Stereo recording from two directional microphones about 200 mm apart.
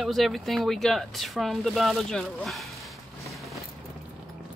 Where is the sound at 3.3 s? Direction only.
Centre (ahead or behind).